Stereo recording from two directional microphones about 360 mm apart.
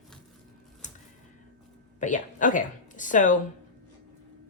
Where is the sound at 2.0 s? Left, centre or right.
Left.